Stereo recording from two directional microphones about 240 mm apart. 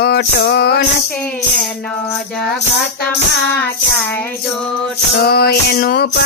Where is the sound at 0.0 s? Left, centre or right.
Left.